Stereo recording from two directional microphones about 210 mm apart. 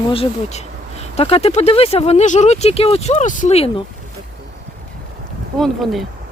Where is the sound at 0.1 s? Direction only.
30° left (ahead or behind).